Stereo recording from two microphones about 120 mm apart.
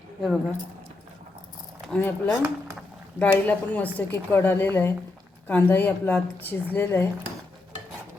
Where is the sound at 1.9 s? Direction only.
15° left (ahead or behind).